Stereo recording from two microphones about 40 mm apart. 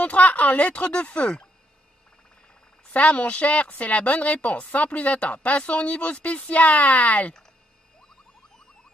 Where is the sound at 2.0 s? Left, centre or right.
Centre.